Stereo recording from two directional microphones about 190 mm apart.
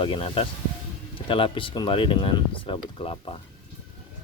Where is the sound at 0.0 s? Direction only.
25° left (ahead or behind).